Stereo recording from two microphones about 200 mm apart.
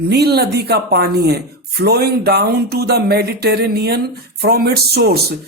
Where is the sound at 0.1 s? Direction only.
55° right (ahead or behind).